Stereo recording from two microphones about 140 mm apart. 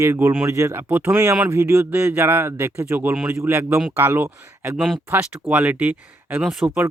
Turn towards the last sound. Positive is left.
turn(degrees=-20)  # may be behind; listen again after turning